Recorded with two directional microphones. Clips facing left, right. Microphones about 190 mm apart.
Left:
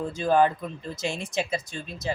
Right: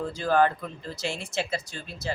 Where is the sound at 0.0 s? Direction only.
20° left (ahead or behind).